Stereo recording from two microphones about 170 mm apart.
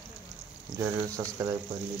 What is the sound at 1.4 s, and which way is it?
Speech, 15° right (ahead or behind).